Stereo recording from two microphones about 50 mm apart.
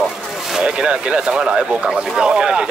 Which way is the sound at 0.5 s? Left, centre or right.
Centre.